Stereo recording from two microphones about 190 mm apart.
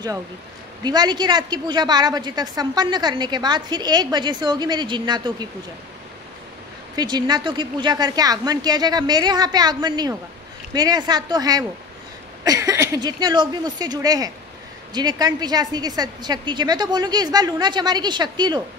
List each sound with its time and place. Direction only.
0.8 s a woman's voice: 20° right (ahead or behind)
7.0 s a woman's voice: 20° right (ahead or behind)